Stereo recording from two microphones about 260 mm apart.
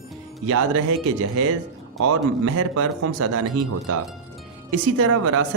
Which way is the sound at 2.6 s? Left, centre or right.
Right.